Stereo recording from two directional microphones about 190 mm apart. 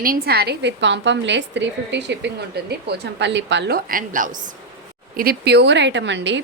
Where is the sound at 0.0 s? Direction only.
50° right (ahead or behind).